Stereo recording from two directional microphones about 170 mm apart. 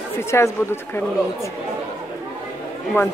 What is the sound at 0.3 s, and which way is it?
Speech, 15° left (ahead or behind).